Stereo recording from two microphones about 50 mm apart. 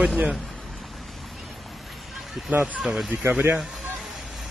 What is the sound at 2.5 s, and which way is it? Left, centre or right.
Speech, right.